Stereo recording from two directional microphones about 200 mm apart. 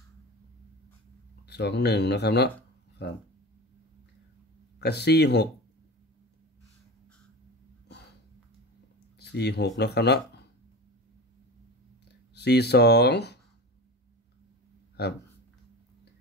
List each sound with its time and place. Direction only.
1.5 s speech: 55° left (ahead or behind)
4.7 s speech: 55° left (ahead or behind)
9.2 s speech: 55° left (ahead or behind)
12.4 s speech: 55° left (ahead or behind)
15.0 s speech: 55° left (ahead or behind)